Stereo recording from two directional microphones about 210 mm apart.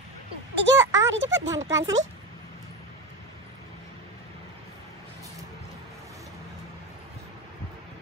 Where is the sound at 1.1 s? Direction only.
60° right (ahead or behind).